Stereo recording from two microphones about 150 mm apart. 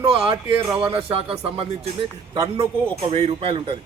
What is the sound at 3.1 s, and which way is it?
Speech, 40° right (ahead or behind).